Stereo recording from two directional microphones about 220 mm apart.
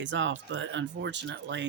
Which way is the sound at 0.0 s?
55° right (ahead or behind).